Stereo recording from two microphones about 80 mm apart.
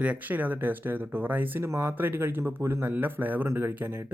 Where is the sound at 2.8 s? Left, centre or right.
Right.